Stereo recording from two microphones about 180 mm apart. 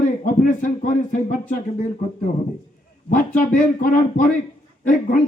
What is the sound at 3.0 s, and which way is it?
Speech, 50° left (ahead or behind).